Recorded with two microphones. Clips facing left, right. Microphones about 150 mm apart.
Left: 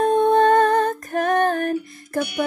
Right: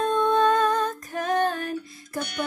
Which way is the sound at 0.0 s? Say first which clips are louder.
Left 5 dB; 60° left (ahead or behind).